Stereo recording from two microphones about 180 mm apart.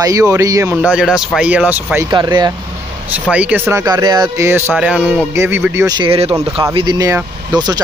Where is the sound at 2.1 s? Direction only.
25° right (ahead or behind).